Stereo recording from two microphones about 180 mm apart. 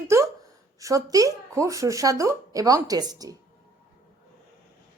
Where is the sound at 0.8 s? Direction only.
20° right (ahead or behind).